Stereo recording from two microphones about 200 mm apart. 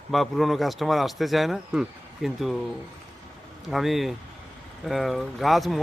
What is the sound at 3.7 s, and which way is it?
Speech, centre (ahead or behind).